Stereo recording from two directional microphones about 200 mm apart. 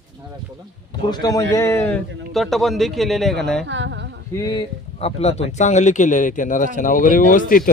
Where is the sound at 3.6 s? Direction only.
65° right (ahead or behind).